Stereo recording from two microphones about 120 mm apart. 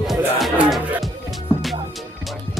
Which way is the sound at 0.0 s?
Centre (ahead or behind).